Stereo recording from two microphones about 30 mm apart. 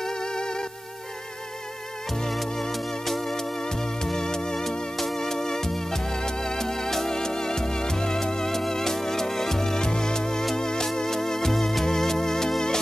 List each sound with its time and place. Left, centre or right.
0.0 s music: left
3.1 s music: centre